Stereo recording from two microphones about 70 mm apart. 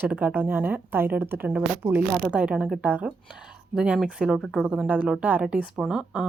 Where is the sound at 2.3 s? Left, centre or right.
Centre.